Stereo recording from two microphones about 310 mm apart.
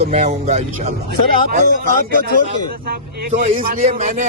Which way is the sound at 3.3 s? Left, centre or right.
Right.